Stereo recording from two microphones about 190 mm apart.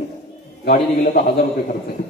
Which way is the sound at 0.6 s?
50° left (ahead or behind).